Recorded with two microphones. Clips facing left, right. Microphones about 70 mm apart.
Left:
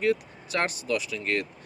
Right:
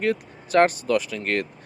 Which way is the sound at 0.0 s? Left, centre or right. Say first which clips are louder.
Right 1 dB; right.